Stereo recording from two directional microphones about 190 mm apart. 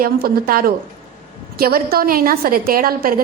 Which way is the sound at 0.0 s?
50° right (ahead or behind).